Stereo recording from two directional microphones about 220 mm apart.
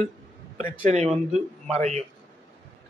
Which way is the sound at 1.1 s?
Centre (ahead or behind).